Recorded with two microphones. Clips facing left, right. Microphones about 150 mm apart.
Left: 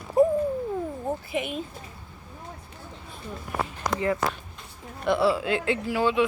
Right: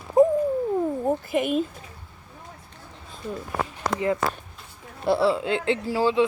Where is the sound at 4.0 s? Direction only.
20° right (ahead or behind).